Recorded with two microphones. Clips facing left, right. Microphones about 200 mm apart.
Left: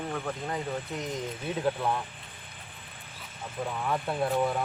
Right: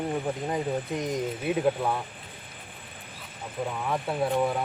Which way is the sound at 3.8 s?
5° right (ahead or behind).